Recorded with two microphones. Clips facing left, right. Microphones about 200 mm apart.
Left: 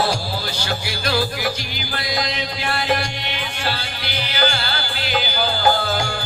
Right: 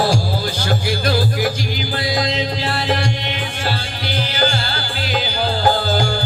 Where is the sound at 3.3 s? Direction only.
45° right (ahead or behind).